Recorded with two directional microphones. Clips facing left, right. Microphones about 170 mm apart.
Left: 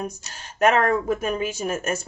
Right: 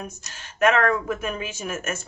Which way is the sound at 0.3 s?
35° left (ahead or behind).